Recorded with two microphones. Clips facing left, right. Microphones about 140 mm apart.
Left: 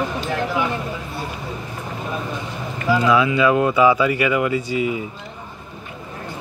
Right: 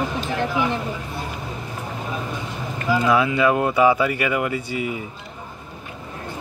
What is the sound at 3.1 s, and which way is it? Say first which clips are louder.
Speech: left 1 dB; 50° right (ahead or behind).